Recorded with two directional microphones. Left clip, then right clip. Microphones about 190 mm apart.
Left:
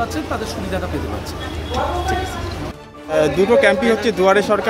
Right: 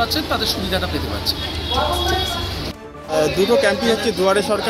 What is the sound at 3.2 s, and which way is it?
A man's voice, 15° left (ahead or behind).